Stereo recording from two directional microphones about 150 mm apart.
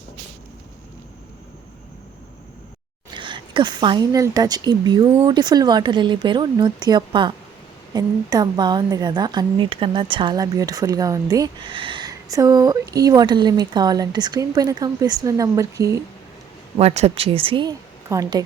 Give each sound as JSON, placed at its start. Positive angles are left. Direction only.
{"t": 3.2, "sound": "a woman's voice", "side_deg": -30}
{"t": 16.7, "sound": "speech", "side_deg": -45}